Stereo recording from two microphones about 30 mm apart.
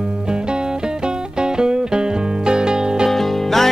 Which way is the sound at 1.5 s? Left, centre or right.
Right.